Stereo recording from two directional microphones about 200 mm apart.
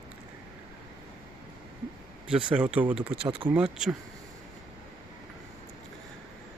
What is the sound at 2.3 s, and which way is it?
Speech, 5° right (ahead or behind).